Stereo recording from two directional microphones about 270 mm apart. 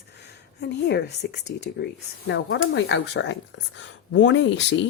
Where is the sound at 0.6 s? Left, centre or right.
Left.